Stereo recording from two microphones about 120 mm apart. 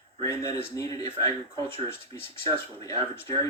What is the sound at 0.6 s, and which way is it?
Speech, 30° left (ahead or behind).